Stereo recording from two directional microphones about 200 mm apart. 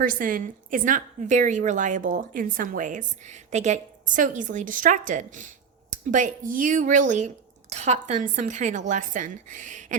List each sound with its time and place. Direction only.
0.0 s a woman's voice: 45° right (ahead or behind)